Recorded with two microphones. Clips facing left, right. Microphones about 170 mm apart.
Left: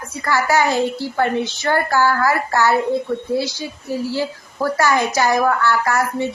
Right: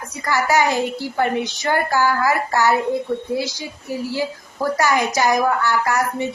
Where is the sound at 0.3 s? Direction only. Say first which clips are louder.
Left 1 dB; 15° right (ahead or behind).